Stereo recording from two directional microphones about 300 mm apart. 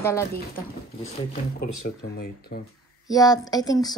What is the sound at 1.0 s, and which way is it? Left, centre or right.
Speech, left.